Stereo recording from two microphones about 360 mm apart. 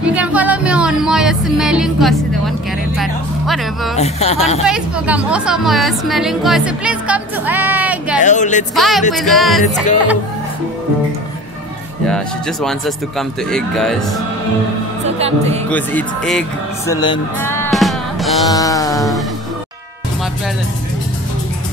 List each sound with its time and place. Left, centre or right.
0.0 s music: centre
3.0 s a woman's voice: centre
3.9 s speech: centre
4.6 s a woman's voice: centre
8.2 s speech: centre
8.7 s a woman's voice: centre
12.1 s a woman's voice: centre
15.1 s a woman's voice: centre
15.7 s speech: centre